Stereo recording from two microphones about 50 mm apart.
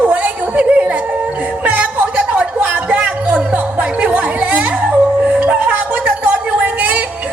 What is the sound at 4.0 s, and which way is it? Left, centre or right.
Chatter, right.